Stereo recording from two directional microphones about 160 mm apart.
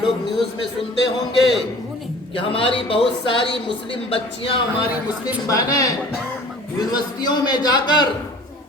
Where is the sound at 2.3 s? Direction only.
35° left (ahead or behind).